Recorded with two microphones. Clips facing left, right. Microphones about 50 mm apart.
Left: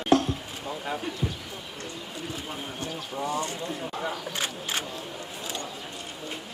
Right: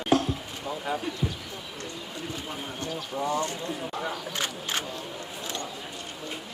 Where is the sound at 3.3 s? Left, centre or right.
Right.